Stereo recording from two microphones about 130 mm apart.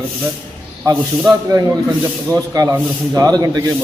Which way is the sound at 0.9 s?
25° right (ahead or behind).